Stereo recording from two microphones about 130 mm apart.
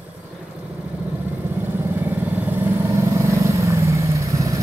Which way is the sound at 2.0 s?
15° right (ahead or behind).